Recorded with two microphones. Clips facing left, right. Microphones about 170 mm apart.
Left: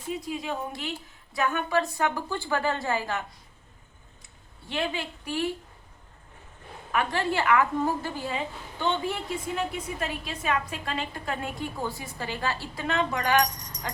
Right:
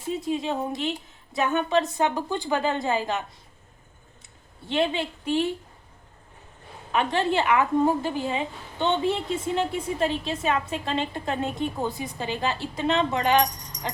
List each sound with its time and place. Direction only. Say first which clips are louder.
0.1 s a woman's voice: right 5 dB; 25° right (ahead or behind)
4.7 s a woman's voice: right 6 dB; 25° right (ahead or behind)
6.9 s a woman's voice: right 3 dB; 25° right (ahead or behind)